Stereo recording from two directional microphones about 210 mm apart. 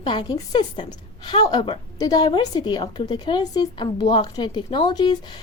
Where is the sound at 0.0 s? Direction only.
20° left (ahead or behind).